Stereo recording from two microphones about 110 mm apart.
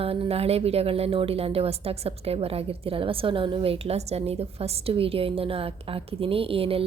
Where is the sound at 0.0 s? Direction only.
60° right (ahead or behind).